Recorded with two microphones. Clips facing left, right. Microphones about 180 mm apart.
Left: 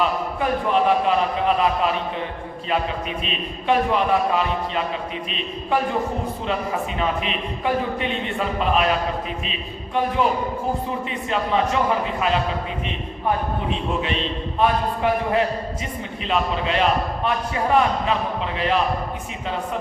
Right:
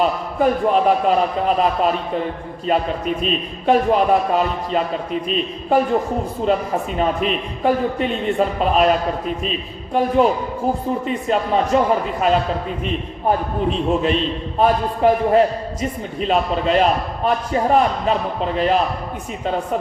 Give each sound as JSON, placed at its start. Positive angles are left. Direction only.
{"t": 0.0, "sound": "a man's voice", "side_deg": -40}
{"t": 7.0, "sound": "a man's voice", "side_deg": -45}
{"t": 13.7, "sound": "a man's voice", "side_deg": -40}